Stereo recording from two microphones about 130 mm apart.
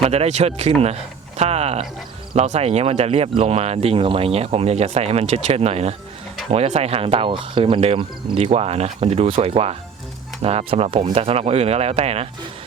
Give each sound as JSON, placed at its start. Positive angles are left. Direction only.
{"t": 0.0, "sound": "speech", "side_deg": -55}